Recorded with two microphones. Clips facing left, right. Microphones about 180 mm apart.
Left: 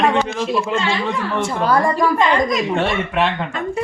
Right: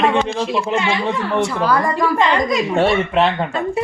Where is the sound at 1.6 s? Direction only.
25° left (ahead or behind).